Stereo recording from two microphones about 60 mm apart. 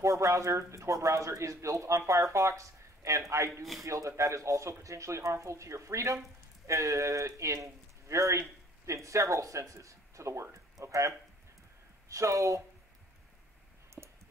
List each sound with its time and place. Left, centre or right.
0.0 s speech: right